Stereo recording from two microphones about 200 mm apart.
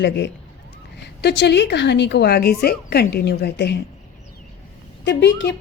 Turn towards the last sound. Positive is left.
turn(degrees=60)  # may be behind; listen again after turning